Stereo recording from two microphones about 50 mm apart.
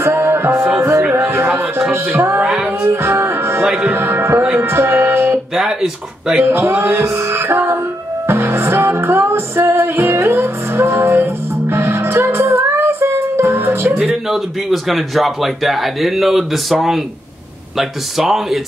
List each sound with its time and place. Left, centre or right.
0.0 s music: right
1.1 s a sound: right
1.6 s music: right
7.2 s music: right
11.0 s music: right
14.3 s speech: centre